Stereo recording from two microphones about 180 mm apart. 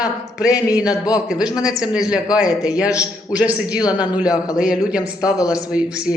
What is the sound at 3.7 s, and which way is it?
Speech, 20° left (ahead or behind).